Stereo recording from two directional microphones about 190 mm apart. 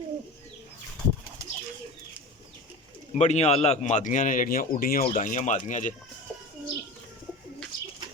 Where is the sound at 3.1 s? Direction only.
35° left (ahead or behind).